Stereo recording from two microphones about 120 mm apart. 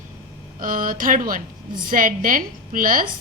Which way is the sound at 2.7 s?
90° right.